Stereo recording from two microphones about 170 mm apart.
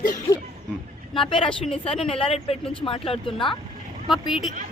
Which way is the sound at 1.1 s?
30° left (ahead or behind).